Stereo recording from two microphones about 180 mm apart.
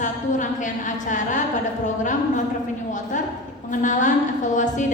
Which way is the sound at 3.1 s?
45° left (ahead or behind).